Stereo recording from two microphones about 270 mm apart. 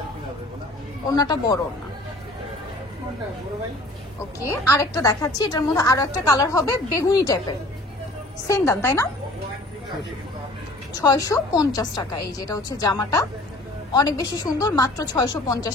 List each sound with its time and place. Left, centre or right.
1.1 s a woman's voice: centre
4.5 s a woman's voice: centre
8.5 s a woman's voice: centre
11.0 s a woman's voice: centre